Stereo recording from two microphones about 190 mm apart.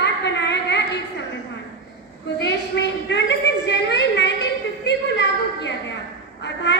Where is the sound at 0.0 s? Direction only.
65° left (ahead or behind).